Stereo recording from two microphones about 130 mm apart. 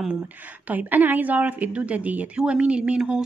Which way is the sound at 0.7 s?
15° right (ahead or behind).